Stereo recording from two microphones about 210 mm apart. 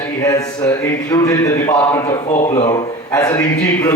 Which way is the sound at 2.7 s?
15° left (ahead or behind).